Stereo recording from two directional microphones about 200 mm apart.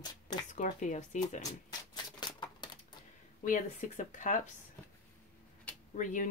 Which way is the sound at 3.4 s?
40° left (ahead or behind).